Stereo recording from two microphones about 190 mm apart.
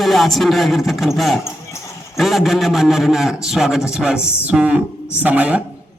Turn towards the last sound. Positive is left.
turn(degrees=-5)  # may be behind; listen again after turning